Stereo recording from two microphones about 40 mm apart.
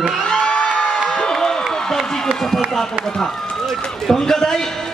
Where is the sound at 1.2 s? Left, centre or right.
Centre.